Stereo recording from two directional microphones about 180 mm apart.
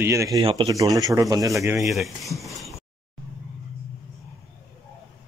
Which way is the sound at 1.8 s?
Centre (ahead or behind).